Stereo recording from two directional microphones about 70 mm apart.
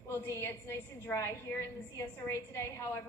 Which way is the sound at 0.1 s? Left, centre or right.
Left.